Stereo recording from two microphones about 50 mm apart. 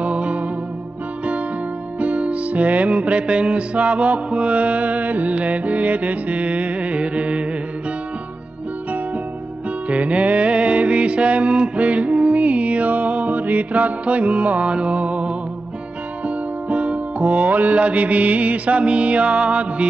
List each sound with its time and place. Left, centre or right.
0.0 s music: right
2.0 s music: right
9.8 s music: right